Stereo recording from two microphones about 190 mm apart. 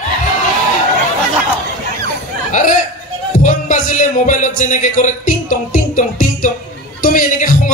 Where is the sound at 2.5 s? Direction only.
45° left (ahead or behind).